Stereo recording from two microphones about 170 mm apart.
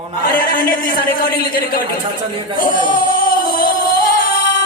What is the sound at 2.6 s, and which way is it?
Music, 55° left (ahead or behind).